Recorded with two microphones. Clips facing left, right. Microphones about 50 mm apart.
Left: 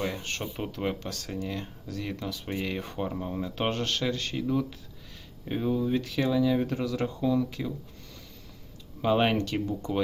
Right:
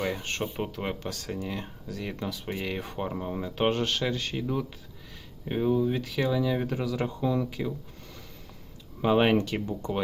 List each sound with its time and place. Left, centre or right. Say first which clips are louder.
0.0 s speech: right 2 dB; centre
0.7 s speech: left 1 dB; centre
9.0 s speech: right 2 dB; centre